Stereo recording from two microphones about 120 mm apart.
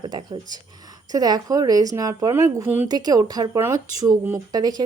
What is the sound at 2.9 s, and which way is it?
A woman's voice, 35° right (ahead or behind).